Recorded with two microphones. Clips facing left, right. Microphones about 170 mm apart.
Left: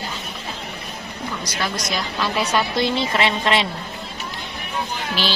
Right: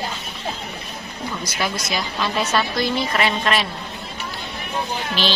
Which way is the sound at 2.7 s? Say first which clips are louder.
Left 1 dB; 25° left (ahead or behind).